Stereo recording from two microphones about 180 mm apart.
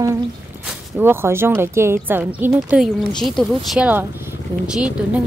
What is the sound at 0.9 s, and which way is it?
Speech, 15° right (ahead or behind).